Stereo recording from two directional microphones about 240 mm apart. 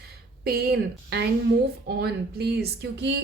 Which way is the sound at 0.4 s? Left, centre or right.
Right.